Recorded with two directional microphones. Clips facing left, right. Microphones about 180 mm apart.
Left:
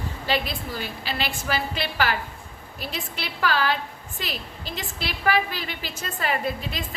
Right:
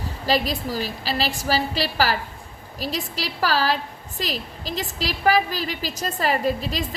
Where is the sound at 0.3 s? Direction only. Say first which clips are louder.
Right 5 dB; 40° right (ahead or behind).